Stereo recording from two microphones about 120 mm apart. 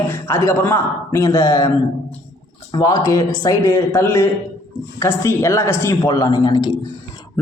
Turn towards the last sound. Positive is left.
turn(degrees=35)  # may be behind; listen again after turning